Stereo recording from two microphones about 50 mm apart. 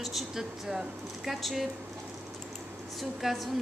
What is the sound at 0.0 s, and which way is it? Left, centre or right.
Speech, centre.